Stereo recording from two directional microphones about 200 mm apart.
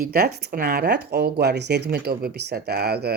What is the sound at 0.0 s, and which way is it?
Speech, 50° right (ahead or behind).